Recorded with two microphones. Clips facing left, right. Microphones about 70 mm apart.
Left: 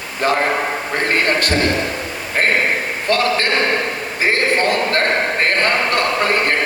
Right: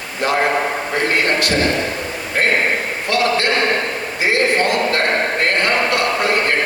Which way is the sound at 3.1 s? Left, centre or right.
Left.